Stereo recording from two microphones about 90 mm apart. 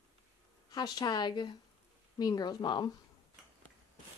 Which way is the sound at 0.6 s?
50° left (ahead or behind).